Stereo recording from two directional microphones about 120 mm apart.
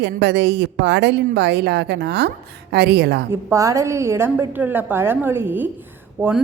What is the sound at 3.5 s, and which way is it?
A woman's voice, 25° right (ahead or behind).